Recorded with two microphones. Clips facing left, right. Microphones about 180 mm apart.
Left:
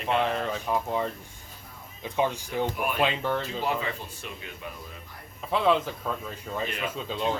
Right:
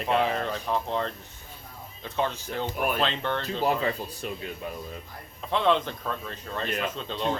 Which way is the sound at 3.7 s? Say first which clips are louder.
Right 4 dB; 40° right (ahead or behind).